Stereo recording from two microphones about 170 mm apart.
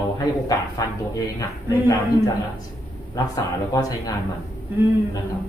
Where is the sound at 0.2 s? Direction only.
25° left (ahead or behind).